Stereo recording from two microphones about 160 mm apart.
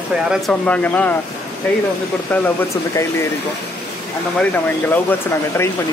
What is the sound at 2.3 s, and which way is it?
Speech, 15° left (ahead or behind).